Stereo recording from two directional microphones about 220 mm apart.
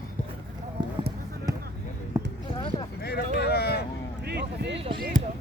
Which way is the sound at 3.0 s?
45° left (ahead or behind).